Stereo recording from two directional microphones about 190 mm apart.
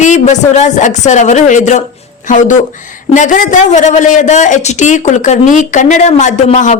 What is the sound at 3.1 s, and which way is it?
A woman's voice, 40° left (ahead or behind).